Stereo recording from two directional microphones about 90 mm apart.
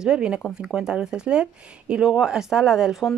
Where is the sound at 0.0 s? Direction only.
10° right (ahead or behind).